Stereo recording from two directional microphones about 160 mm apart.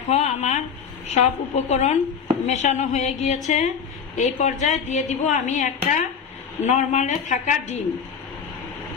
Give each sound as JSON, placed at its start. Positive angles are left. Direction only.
{"t": 0.0, "sound": "a woman's voice", "side_deg": 45}